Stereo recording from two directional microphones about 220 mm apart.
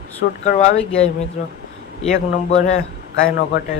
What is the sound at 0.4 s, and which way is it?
A man's voice, 35° left (ahead or behind).